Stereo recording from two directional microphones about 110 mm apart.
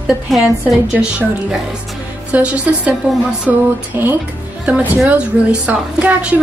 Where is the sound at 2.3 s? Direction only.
10° right (ahead or behind).